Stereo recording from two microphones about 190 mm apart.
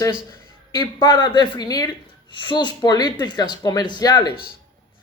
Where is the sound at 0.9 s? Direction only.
25° left (ahead or behind).